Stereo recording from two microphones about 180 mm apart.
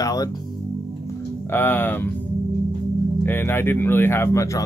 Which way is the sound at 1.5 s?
10° left (ahead or behind).